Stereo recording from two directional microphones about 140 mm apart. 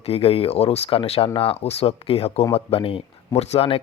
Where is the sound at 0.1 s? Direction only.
45° left (ahead or behind).